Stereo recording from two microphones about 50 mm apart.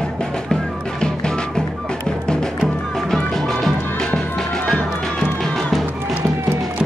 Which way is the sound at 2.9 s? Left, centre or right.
Centre.